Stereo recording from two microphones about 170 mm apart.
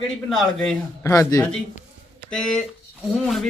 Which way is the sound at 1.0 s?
20° left (ahead or behind).